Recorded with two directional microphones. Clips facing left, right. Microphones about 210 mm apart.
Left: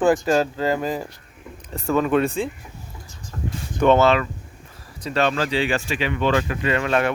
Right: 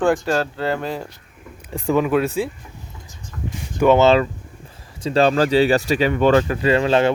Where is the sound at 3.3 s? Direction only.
35° left (ahead or behind).